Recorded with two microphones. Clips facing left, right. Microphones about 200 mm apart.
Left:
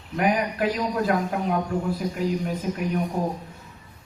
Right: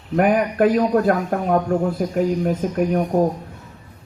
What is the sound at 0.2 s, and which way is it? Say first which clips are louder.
A man's voice: right 7 dB; 50° right (ahead or behind).